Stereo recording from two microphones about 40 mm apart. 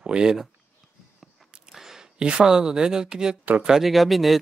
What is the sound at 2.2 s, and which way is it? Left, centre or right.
Speech, right.